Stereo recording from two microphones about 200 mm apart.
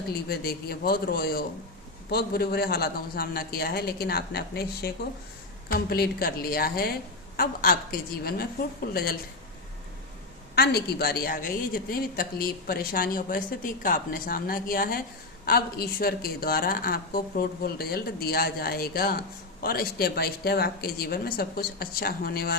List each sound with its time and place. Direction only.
0.1 s a woman's voice: 50° left (ahead or behind)
10.5 s a woman's voice: 50° left (ahead or behind)